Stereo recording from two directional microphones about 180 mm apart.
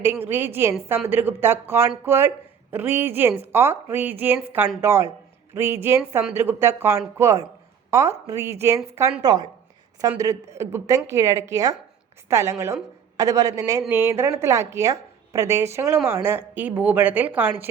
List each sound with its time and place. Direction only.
0.0 s a woman's voice: 10° right (ahead or behind)